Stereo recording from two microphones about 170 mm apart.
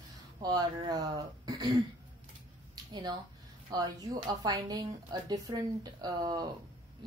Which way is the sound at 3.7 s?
25° right (ahead or behind).